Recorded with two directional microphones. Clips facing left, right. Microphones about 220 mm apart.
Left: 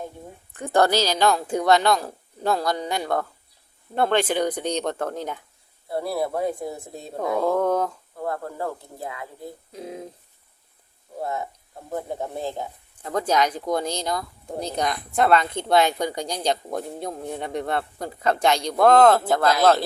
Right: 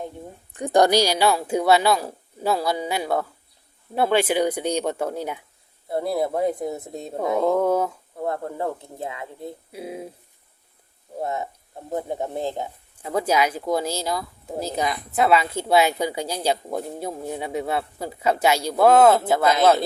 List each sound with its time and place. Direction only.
0.5 s speech: 15° right (ahead or behind)
5.9 s speech: 20° right (ahead or behind)
7.5 s speech: 10° right (ahead or behind)
8.2 s speech: 20° right (ahead or behind)
9.7 s speech: 10° right (ahead or behind)
11.2 s speech: 20° right (ahead or behind)